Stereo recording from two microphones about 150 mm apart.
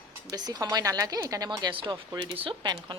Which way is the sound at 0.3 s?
25° right (ahead or behind).